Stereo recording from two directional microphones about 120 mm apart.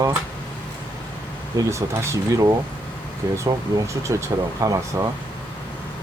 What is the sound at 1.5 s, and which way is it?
Speech, 30° right (ahead or behind).